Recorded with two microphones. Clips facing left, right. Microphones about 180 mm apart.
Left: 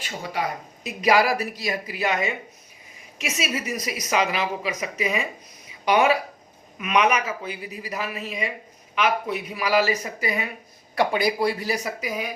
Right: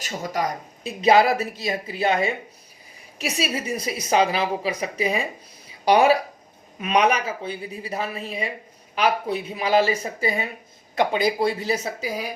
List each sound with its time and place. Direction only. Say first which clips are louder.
0.0 s speech: right 2 dB; 40° right (ahead or behind)
0.9 s a woman's voice: right 3 dB; 25° right (ahead or behind)